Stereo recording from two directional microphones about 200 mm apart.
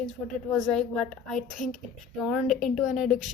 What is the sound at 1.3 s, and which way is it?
Speech, 40° left (ahead or behind).